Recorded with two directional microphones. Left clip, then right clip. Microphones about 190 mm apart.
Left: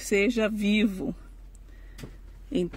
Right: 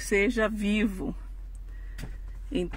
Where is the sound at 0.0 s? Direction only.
10° left (ahead or behind).